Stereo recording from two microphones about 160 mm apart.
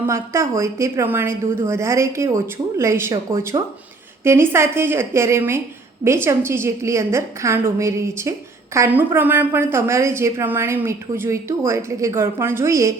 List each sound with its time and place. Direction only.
0.0 s a woman's voice: 15° right (ahead or behind)